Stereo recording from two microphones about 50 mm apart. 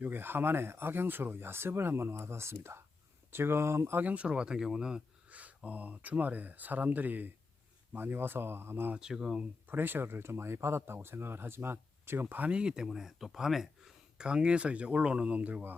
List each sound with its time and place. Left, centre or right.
0.0 s speech: right
4.0 s speech: right
5.3 s speech: right
9.0 s speech: centre
9.6 s speech: right
12.5 s speech: centre; by 15.8 s right